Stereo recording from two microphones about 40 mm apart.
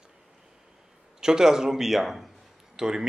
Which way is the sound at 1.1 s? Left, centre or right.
Centre.